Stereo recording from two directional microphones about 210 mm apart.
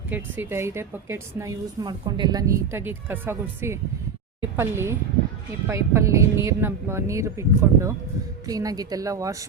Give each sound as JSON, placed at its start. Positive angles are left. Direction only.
{"t": 0.1, "sound": "a woman's voice", "side_deg": -10}